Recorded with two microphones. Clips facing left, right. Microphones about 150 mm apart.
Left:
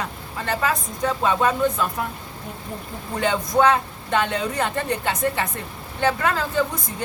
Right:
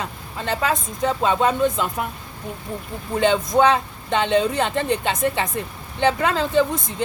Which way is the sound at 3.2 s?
20° right (ahead or behind).